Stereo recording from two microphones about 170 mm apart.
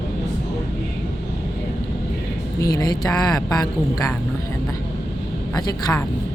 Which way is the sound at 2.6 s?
20° left (ahead or behind).